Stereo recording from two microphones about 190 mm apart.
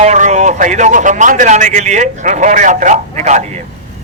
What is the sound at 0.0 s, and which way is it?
Speech, 35° right (ahead or behind).